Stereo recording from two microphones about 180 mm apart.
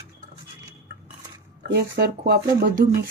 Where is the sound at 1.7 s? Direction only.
65° right (ahead or behind).